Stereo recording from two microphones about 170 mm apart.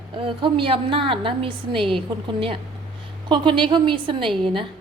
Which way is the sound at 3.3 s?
30° right (ahead or behind).